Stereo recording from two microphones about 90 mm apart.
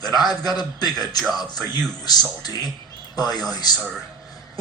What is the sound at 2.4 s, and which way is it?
A man's voice, 50° left (ahead or behind).